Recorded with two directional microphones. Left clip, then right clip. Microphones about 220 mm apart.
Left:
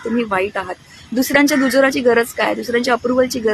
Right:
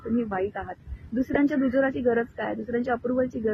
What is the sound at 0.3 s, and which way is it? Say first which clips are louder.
Speech: left 10 dB; 20° left (ahead or behind).